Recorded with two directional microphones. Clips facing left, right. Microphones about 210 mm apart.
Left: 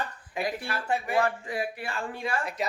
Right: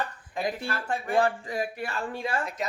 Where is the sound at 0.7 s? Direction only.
10° left (ahead or behind).